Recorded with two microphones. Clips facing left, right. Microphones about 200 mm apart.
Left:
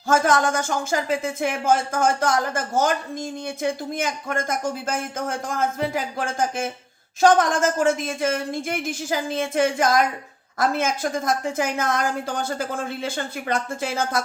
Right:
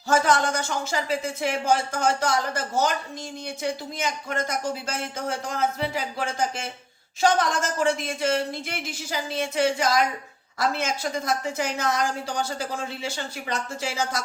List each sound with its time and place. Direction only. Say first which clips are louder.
0.1 s a woman's voice: left 2 dB; 50° left (ahead or behind)